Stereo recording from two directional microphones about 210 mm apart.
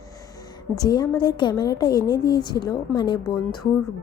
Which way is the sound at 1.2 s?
20° left (ahead or behind).